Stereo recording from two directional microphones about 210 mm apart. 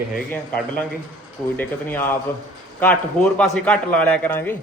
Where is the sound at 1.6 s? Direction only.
10° left (ahead or behind).